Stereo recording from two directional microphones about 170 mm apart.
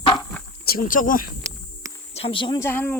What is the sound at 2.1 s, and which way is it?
Speech, 30° left (ahead or behind).